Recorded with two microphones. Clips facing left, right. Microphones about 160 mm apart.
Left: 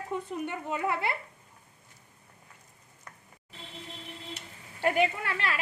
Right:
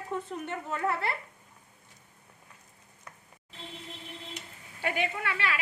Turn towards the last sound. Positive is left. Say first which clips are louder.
# left 4 dB
turn(degrees=45)  # may be behind; listen again after turning